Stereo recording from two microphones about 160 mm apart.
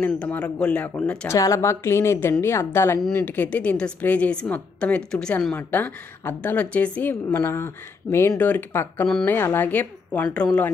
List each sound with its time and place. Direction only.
0.0 s a woman's voice: 10° left (ahead or behind)